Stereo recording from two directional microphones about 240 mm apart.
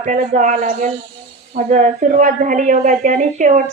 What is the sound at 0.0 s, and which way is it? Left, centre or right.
Speech, right.